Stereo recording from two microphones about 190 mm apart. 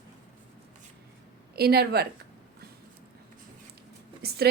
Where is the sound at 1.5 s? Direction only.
55° right (ahead or behind).